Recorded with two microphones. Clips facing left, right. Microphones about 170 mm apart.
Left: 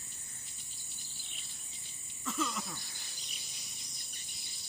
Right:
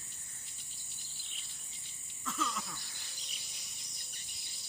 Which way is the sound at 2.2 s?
15° left (ahead or behind).